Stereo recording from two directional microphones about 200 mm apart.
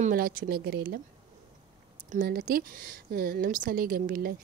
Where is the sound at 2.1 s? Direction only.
50° right (ahead or behind).